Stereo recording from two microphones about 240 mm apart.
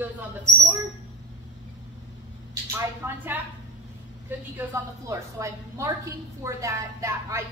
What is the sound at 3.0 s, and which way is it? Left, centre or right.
A woman's voice, centre.